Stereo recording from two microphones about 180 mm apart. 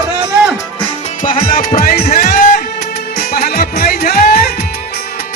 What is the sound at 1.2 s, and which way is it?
Music, 50° left (ahead or behind).